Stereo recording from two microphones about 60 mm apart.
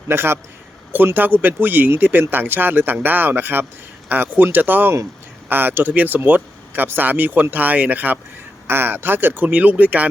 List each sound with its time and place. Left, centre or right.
0.1 s speech: right
8.6 s speech: right